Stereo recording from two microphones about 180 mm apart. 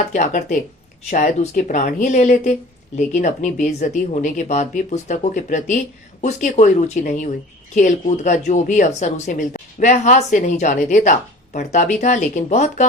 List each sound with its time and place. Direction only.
0.1 s speech: 45° left (ahead or behind)